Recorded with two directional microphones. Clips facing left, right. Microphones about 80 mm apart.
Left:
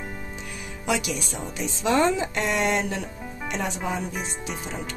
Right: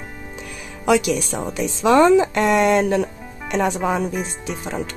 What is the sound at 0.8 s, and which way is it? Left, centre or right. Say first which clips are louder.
Speech: right 9 dB; right.